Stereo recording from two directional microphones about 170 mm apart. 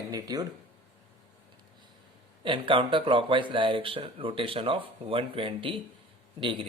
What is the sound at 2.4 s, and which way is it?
A man's voice, 30° right (ahead or behind).